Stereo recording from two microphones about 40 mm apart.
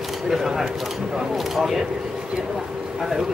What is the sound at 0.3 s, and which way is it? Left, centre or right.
Speech, centre.